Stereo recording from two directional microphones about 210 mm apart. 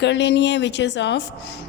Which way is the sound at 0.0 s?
55° left (ahead or behind).